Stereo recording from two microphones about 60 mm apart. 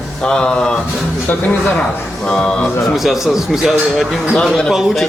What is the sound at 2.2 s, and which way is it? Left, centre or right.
Speech, centre.